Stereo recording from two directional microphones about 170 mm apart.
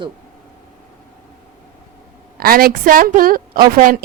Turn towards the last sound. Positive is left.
turn(degrees=-55)  # may be behind; listen again after turning